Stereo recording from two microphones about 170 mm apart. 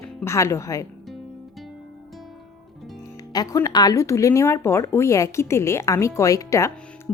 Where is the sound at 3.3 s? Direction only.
20° left (ahead or behind).